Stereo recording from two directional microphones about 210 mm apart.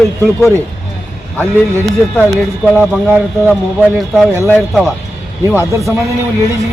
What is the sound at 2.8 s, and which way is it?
Speech, 5° right (ahead or behind).